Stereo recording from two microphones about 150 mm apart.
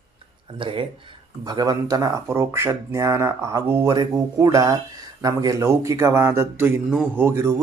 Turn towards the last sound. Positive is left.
turn(degrees=-15)  # may be behind; listen again after turning